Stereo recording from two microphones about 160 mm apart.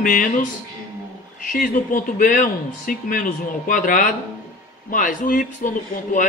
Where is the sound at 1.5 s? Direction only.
60° left (ahead or behind).